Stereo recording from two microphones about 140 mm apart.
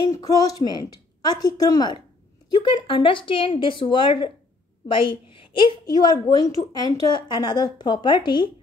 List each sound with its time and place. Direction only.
0.0 s a woman's voice: 25° left (ahead or behind)